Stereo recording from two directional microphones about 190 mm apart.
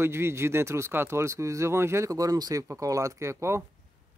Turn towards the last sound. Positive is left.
turn(degrees=-15)  # may be behind; listen again after turning